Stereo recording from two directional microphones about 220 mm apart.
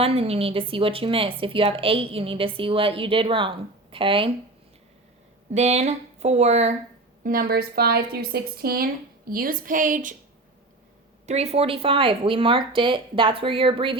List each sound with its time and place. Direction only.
0.0 s a woman's voice: 25° right (ahead or behind)
5.5 s a woman's voice: 30° right (ahead or behind)
7.3 s a woman's voice: 40° right (ahead or behind)
11.3 s a woman's voice: 30° right (ahead or behind)